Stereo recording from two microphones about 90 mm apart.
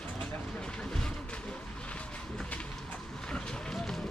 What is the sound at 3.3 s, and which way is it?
Run, 5° left (ahead or behind).